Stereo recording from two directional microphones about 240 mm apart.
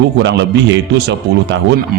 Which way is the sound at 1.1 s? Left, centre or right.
Right.